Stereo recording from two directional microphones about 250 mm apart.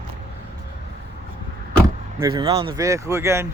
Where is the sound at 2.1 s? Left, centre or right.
Centre.